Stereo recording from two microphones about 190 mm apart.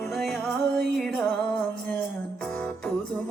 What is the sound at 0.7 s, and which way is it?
Music, centre (ahead or behind).